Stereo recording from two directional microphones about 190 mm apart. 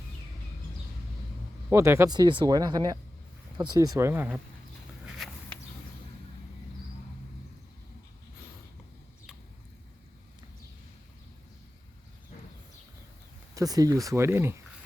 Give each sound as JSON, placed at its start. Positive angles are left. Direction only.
{"t": 1.7, "sound": "speech", "side_deg": -15}
{"t": 5.0, "sound": "walk", "side_deg": 0}
{"t": 13.5, "sound": "speech", "side_deg": -20}